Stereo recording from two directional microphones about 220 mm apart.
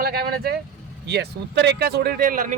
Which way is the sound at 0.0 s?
45° right (ahead or behind).